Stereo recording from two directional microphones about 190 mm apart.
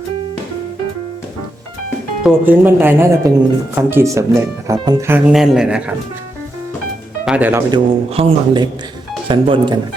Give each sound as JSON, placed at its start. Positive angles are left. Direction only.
{"t": 2.2, "sound": "speech", "side_deg": -10}
{"t": 5.3, "sound": "speech", "side_deg": -5}
{"t": 7.3, "sound": "speech", "side_deg": -10}
{"t": 7.7, "sound": "a man's voice", "side_deg": -25}